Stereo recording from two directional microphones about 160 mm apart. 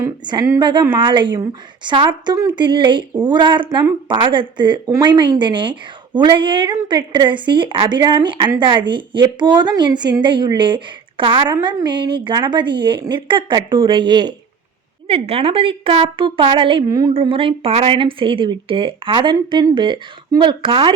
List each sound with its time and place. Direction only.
0.0 s speech: 25° right (ahead or behind)
15.0 s speech: 40° right (ahead or behind)